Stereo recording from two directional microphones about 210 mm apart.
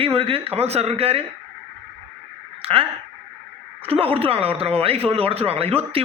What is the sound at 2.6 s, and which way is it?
Speech, 25° right (ahead or behind).